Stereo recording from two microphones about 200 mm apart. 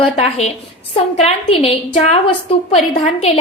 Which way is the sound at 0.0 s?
30° left (ahead or behind).